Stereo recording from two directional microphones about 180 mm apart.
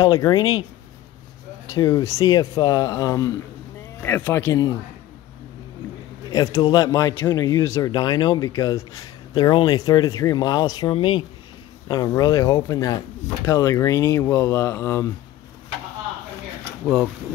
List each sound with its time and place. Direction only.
0.0 s speech: 20° left (ahead or behind)
1.7 s speech: 20° left (ahead or behind)
6.3 s speech: 20° left (ahead or behind)